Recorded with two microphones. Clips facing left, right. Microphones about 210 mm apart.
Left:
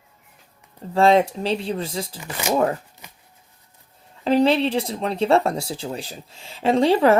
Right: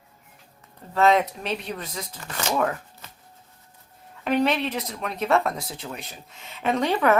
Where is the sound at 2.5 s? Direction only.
25° left (ahead or behind).